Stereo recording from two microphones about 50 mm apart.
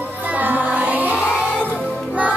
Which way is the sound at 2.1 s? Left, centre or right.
Right.